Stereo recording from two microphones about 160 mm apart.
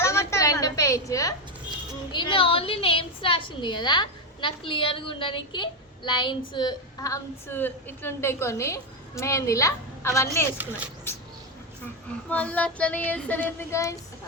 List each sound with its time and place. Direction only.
0.0 s a sound: 15° left (ahead or behind)
2.1 s a woman's voice: 30° left (ahead or behind)
12.3 s child singing: 10° left (ahead or behind)